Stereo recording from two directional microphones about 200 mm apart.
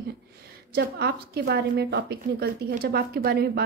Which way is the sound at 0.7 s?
55° right (ahead or behind).